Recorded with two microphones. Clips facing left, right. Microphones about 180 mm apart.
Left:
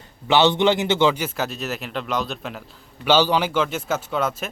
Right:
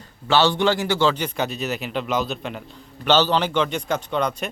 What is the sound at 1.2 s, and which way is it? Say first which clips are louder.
A man's voice: right 1 dB; centre (ahead or behind).